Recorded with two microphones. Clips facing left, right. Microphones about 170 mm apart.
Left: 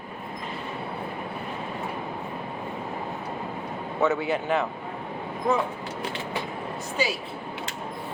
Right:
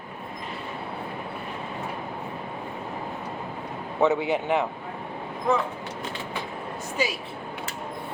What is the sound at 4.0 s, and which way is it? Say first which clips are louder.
Speech: right 2 dB; 15° right (ahead or behind).